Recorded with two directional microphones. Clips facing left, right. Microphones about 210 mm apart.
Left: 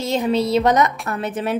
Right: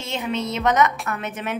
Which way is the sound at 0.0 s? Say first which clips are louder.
Left 7 dB; 35° left (ahead or behind).